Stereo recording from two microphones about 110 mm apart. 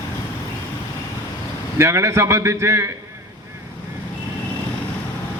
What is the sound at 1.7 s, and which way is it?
A man's voice, 25° right (ahead or behind).